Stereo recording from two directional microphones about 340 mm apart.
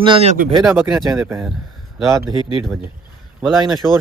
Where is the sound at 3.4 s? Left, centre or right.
Centre.